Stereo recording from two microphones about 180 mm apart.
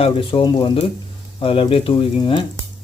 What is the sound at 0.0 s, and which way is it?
Speech, 30° left (ahead or behind).